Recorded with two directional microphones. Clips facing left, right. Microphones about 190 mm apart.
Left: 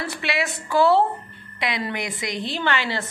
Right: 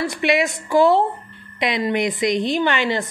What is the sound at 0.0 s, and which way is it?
A woman's voice, 15° right (ahead or behind).